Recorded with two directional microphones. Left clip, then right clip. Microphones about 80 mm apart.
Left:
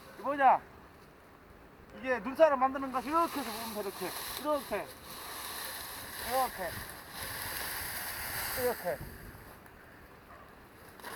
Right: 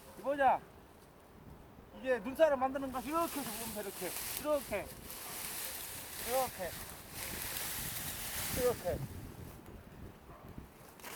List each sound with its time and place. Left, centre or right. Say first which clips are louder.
0.3 s speech: left 5 dB; centre
2.0 s speech: left 4 dB; centre
2.8 s speech: left 5 dB; centre
6.1 s boat: left 3 dB; centre
7.6 s a sound: left 4 dB; centre
8.7 s speech: left 2 dB; left